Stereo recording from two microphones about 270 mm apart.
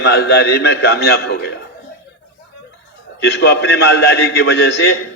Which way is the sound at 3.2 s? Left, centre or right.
Left.